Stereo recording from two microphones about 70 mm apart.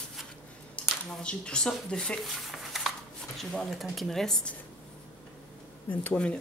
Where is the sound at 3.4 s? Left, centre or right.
Centre.